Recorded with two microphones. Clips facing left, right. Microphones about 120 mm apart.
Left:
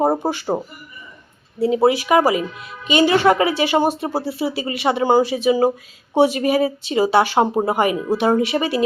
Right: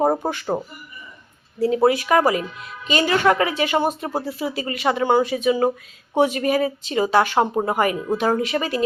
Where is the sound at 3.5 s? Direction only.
30° left (ahead or behind).